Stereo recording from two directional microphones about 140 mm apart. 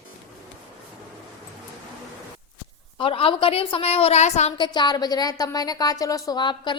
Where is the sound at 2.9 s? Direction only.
40° left (ahead or behind).